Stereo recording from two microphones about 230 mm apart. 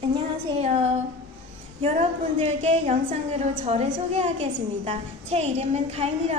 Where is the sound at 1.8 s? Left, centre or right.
Right.